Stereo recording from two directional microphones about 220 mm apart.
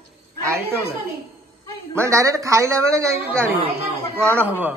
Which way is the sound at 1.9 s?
10° right (ahead or behind).